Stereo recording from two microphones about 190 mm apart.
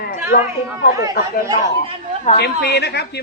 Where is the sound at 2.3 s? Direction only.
60° left (ahead or behind).